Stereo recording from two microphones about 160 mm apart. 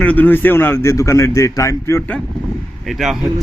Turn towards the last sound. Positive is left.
turn(degrees=0)  # may be behind; listen again after turning